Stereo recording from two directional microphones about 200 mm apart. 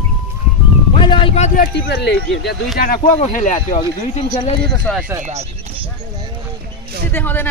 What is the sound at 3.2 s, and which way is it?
Speech, 40° left (ahead or behind).